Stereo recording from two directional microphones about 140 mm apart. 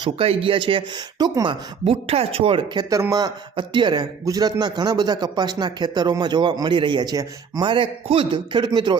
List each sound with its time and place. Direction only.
0.0 s a man's voice: 40° right (ahead or behind)
2.9 s a man's voice: 25° right (ahead or behind)